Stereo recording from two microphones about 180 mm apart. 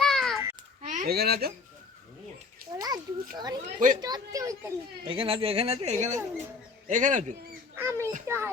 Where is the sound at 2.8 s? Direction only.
20° right (ahead or behind).